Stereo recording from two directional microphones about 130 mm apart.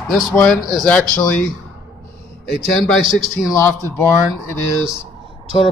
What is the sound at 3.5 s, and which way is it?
Speech, 20° left (ahead or behind).